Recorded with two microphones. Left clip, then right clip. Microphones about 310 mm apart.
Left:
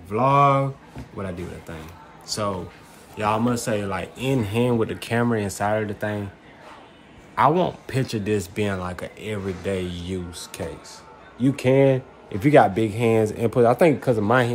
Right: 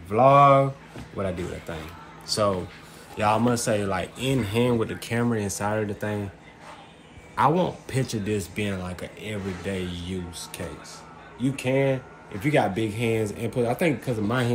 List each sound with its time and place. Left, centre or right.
0.1 s speech: centre
7.3 s speech: centre
11.5 s speech: left
12.5 s speech: centre